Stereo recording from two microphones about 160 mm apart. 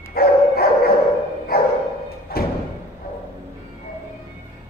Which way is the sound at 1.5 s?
75° left (ahead or behind).